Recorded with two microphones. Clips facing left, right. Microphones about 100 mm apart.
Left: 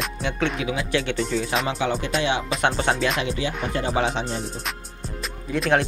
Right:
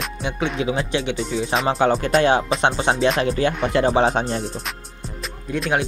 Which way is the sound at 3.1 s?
40° right (ahead or behind).